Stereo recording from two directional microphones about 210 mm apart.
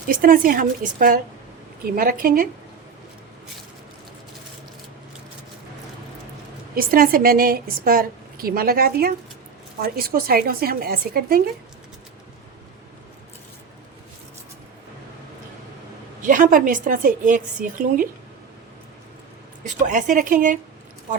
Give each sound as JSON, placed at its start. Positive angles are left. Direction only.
{"t": 0.1, "sound": "a woman's voice", "side_deg": -40}
{"t": 6.7, "sound": "a woman's voice", "side_deg": -45}
{"t": 16.2, "sound": "a woman's voice", "side_deg": -40}
{"t": 19.6, "sound": "a woman's voice", "side_deg": -35}